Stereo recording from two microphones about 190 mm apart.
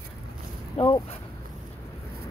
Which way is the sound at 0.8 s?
35° left (ahead or behind).